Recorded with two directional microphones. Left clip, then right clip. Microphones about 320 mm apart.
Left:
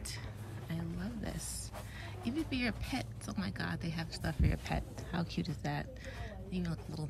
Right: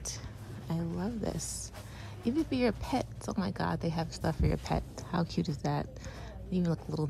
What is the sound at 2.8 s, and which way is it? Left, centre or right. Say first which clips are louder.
A woman's voice: right 7 dB; centre.